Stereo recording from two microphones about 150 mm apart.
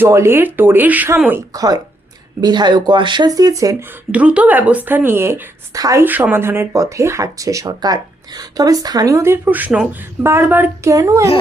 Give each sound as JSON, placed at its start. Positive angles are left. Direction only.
{"t": 0.0, "sound": "speech", "side_deg": -15}
{"t": 1.5, "sound": "speech", "side_deg": -25}
{"t": 4.1, "sound": "speech", "side_deg": -10}